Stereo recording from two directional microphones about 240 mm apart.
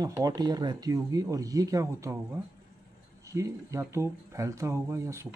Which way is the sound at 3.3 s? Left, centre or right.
Centre.